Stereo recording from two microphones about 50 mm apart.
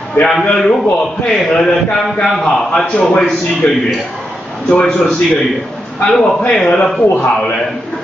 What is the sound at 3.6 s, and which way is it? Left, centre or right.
Speech, left.